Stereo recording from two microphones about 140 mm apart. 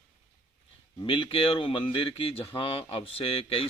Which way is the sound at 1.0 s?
35° left (ahead or behind).